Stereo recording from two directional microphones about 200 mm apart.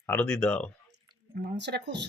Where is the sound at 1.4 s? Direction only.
60° right (ahead or behind).